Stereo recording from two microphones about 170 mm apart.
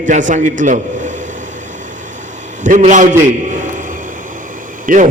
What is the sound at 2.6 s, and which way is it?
Speech, 50° right (ahead or behind).